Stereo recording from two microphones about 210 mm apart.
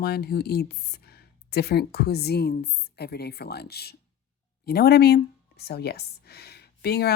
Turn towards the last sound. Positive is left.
turn(degrees=50)  # may be behind; listen again after turning